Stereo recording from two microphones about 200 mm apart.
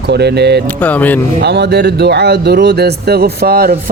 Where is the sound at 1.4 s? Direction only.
55° right (ahead or behind).